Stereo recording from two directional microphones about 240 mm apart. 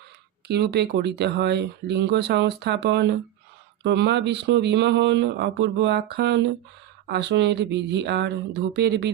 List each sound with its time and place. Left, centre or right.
0.4 s speech: right